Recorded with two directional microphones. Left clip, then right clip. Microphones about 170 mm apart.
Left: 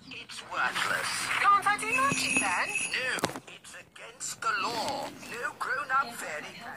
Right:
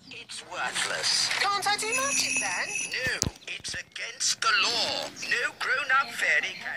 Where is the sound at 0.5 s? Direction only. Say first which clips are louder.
Left 1 dB; 50° right (ahead or behind).